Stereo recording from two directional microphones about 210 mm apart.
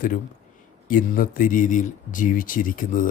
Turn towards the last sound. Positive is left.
turn(degrees=40)  # may be behind; listen again after turning